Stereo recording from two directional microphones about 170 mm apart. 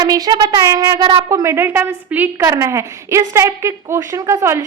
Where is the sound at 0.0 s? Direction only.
25° right (ahead or behind).